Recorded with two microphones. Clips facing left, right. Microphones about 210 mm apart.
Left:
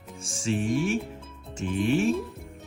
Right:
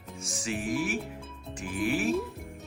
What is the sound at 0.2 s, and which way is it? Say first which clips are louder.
Speech: left 6 dB; 30° left (ahead or behind).